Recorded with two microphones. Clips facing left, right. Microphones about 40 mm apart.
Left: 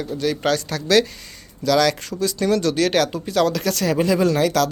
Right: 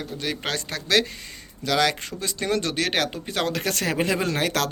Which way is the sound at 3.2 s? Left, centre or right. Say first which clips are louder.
Left 6 dB; right.